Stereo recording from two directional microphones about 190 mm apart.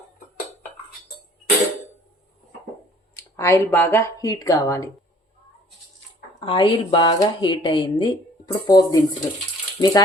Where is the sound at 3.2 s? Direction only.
15° left (ahead or behind).